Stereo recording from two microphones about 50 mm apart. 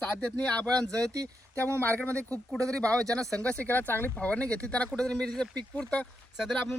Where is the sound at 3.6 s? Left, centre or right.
Left.